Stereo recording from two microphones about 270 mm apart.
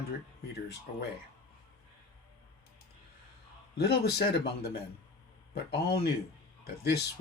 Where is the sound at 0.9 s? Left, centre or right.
Left.